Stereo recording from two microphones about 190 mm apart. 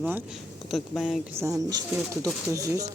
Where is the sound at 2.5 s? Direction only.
15° right (ahead or behind).